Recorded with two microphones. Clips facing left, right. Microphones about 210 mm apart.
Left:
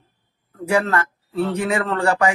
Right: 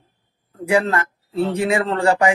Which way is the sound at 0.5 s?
25° right (ahead or behind).